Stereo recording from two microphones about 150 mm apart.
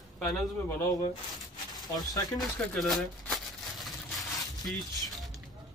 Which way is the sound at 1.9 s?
25° left (ahead or behind).